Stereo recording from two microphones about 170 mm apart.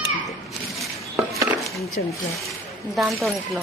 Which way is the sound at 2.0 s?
55° left (ahead or behind).